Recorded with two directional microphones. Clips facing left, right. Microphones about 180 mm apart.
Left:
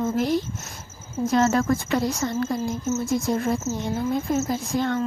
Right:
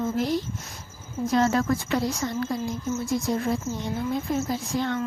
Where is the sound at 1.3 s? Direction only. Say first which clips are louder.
Left 2 dB; 45° left (ahead or behind).